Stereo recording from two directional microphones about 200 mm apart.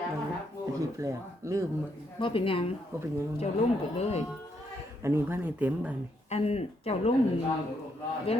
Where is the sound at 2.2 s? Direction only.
25° left (ahead or behind).